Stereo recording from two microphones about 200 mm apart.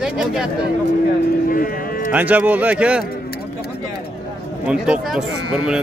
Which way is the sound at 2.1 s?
10° right (ahead or behind).